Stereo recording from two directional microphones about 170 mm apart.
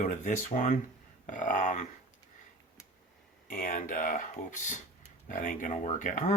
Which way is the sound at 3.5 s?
50° left (ahead or behind).